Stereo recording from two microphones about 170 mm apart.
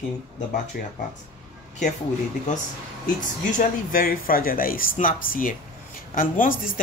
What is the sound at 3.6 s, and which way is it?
Speech, 55° left (ahead or behind).